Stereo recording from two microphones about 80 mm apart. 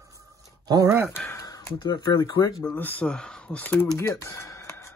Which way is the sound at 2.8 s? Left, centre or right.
Left.